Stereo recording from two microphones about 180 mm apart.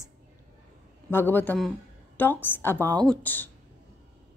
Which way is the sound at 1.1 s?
10° left (ahead or behind).